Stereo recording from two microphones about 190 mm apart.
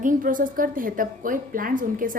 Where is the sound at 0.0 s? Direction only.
45° right (ahead or behind).